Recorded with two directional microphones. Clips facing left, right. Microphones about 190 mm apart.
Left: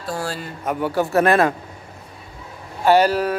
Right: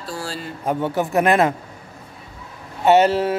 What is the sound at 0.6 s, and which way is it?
Speech, 25° right (ahead or behind).